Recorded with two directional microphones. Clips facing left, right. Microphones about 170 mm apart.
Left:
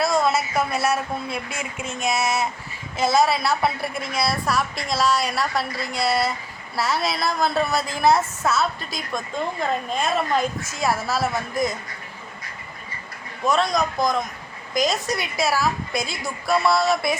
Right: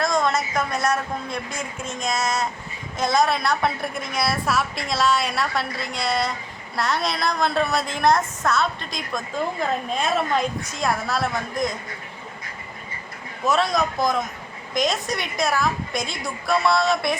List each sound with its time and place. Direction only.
0.0 s a woman's voice: 5° left (ahead or behind)
13.4 s a woman's voice: centre (ahead or behind)